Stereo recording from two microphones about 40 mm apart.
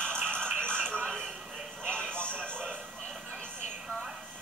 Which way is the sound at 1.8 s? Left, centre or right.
Left.